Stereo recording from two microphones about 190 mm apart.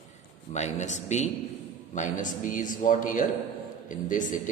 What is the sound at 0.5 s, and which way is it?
Speech, 40° left (ahead or behind).